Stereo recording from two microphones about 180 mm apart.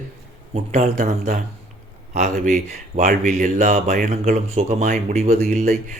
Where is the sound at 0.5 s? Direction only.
40° right (ahead or behind).